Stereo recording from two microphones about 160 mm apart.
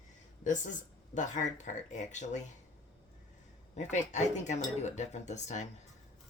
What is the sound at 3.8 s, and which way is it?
Speech, 45° left (ahead or behind).